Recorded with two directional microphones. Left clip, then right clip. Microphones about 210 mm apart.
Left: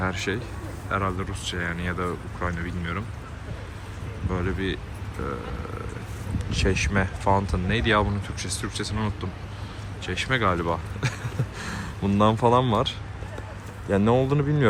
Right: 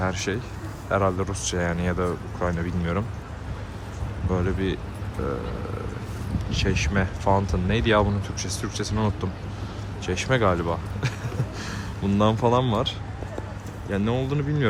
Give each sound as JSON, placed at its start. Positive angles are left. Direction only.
{"t": 0.0, "sound": "speech", "side_deg": -10}
{"t": 4.3, "sound": "speech", "side_deg": -15}
{"t": 6.5, "sound": "speech", "side_deg": 0}